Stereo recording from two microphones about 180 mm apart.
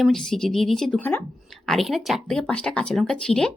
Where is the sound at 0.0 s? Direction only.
Centre (ahead or behind).